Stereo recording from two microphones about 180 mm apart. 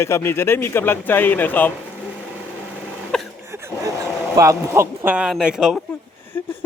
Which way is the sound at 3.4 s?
15° right (ahead or behind).